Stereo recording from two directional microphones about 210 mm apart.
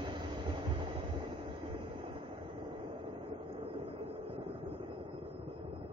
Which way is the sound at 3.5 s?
25° right (ahead or behind).